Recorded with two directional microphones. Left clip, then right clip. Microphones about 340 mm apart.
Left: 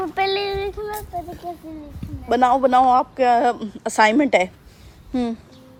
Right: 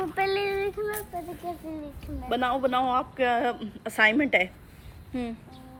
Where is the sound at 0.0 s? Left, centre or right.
Left.